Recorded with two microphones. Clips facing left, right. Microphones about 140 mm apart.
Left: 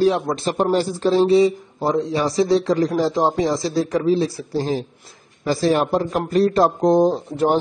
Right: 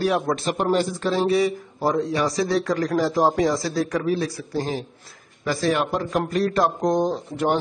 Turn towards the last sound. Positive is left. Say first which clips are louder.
# left 4 dB
turn(degrees=35)  # may be behind; listen again after turning